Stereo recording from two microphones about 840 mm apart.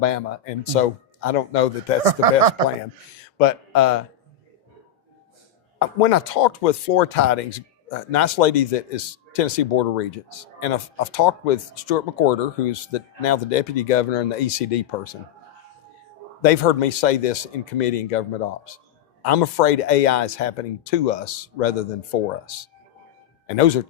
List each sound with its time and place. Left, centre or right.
0.0 s speech: left
6.0 s speech: left
16.4 s speech: left